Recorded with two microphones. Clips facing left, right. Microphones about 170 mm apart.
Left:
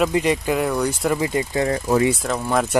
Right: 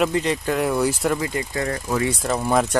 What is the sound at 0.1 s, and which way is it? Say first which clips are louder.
Speech: left 2 dB; 15° left (ahead or behind).